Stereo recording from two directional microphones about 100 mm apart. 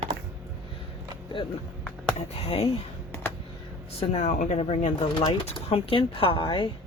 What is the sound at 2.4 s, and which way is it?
Speech, 75° left (ahead or behind).